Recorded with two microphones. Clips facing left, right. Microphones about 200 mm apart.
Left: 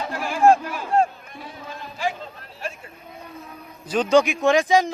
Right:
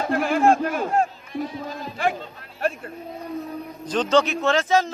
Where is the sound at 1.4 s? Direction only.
40° right (ahead or behind).